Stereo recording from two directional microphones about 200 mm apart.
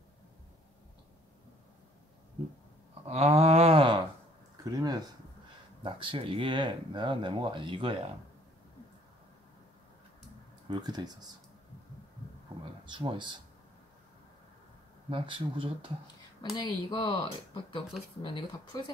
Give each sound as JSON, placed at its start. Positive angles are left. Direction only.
{"t": 3.1, "sound": "a sound", "side_deg": -30}
{"t": 5.8, "sound": "speech", "side_deg": -25}
{"t": 10.7, "sound": "speech", "side_deg": -20}
{"t": 12.8, "sound": "speech", "side_deg": -25}
{"t": 15.0, "sound": "speech", "side_deg": -25}
{"t": 16.5, "sound": "speech", "side_deg": 20}